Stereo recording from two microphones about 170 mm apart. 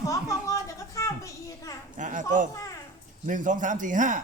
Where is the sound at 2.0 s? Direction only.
50° right (ahead or behind).